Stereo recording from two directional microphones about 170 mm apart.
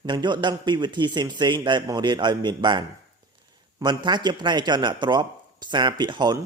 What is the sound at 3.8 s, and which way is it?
A man's voice, 25° right (ahead or behind).